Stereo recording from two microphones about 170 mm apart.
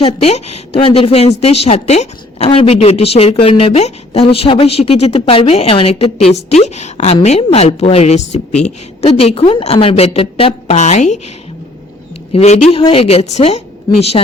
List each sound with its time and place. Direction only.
0.0 s a woman's voice: 35° left (ahead or behind)
12.3 s a woman's voice: 40° left (ahead or behind)